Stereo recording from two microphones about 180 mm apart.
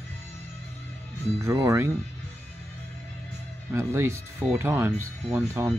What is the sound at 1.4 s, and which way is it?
Speech, 15° right (ahead or behind).